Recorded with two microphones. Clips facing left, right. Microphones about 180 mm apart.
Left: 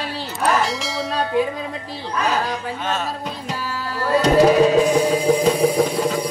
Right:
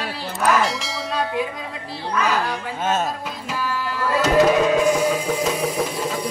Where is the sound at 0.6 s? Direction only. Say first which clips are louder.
Left 2 dB; centre (ahead or behind).